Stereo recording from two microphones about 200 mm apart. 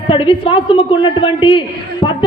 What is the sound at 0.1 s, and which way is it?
A woman's voice, 25° left (ahead or behind).